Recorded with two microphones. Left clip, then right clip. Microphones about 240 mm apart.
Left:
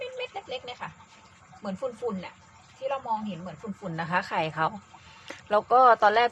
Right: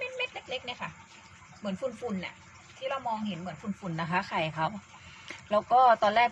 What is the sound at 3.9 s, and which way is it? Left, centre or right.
Speech, left.